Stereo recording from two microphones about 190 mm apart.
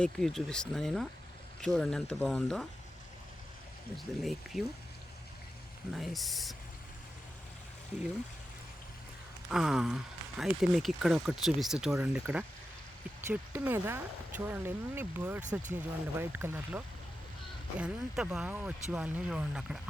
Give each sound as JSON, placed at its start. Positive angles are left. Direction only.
{"t": 0.0, "sound": "speech", "side_deg": 0}
{"t": 3.9, "sound": "speech", "side_deg": 0}
{"t": 5.9, "sound": "speech", "side_deg": 0}
{"t": 9.5, "sound": "speech", "side_deg": -5}